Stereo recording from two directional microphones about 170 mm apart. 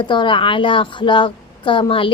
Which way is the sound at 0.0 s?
30° left (ahead or behind).